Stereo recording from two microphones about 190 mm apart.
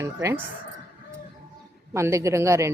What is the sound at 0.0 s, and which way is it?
Speech, 15° right (ahead or behind).